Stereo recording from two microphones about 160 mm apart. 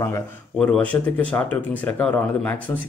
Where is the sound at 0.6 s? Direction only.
5° left (ahead or behind).